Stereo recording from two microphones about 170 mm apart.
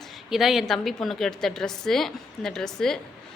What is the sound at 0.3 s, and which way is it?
A woman's voice, centre (ahead or behind).